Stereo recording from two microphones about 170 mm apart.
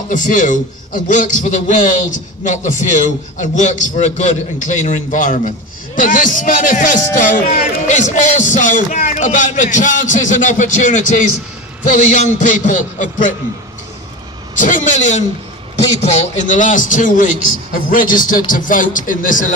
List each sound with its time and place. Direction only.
0.1 s a man's voice: 50° left (ahead or behind)
14.5 s a man's voice: 50° left (ahead or behind)